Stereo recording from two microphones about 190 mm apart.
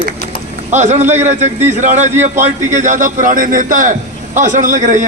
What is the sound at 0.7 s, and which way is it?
A man's voice, 40° right (ahead or behind).